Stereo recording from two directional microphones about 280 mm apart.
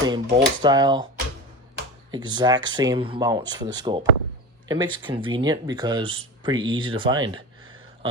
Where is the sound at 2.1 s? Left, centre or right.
Centre.